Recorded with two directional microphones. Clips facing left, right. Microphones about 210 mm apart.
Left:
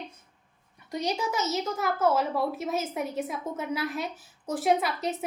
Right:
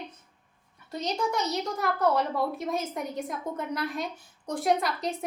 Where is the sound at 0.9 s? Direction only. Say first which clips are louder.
Even; 10° left (ahead or behind).